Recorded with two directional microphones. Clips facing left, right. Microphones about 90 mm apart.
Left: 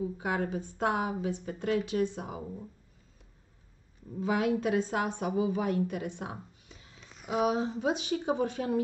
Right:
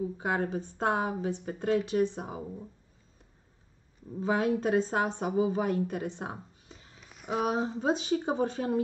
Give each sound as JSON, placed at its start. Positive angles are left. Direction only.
{"t": 0.2, "sound": "a woman's voice", "side_deg": -35}
{"t": 4.2, "sound": "a woman's voice", "side_deg": -35}
{"t": 7.0, "sound": "a sound", "side_deg": -5}
{"t": 7.3, "sound": "a woman's voice", "side_deg": -35}